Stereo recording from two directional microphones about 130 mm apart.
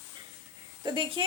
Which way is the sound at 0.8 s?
40° right (ahead or behind).